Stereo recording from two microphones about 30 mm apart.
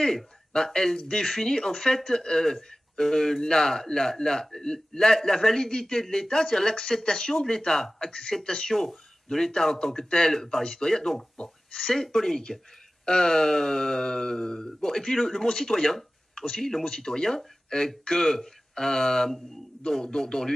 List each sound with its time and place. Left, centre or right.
0.7 s a man's voice: left
8.3 s a man's voice: centre
11.4 s a sound: left
11.9 s a man's voice: centre